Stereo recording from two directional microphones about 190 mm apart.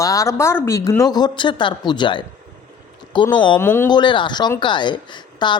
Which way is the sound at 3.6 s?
10° left (ahead or behind).